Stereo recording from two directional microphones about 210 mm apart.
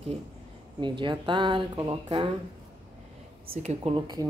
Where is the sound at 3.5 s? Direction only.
30° right (ahead or behind).